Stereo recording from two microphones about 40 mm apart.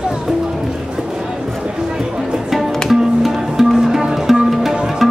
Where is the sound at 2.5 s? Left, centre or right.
Centre.